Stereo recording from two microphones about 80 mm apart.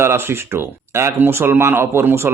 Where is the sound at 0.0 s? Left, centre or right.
Right.